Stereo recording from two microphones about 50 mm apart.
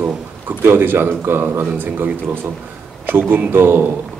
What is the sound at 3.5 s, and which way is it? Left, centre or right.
Speech, right.